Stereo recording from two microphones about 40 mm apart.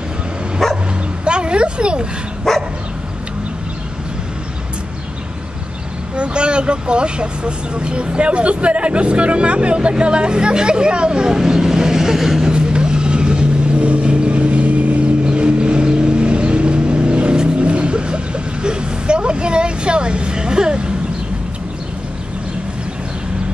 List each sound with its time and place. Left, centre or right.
0.6 s bow-wow: centre
1.2 s a sound: right
2.5 s dog: centre
6.1 s speech: right; by 12.4 s centre
12.4 s vehicle: right